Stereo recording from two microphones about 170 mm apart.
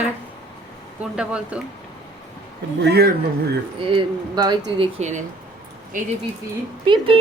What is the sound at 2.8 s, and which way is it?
Speech, 75° right (ahead or behind).